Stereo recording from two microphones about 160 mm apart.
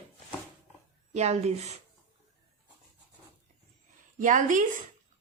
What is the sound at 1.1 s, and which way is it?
Speech, 45° right (ahead or behind).